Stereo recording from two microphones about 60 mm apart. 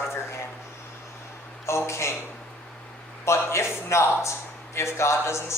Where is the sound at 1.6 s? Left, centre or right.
Left.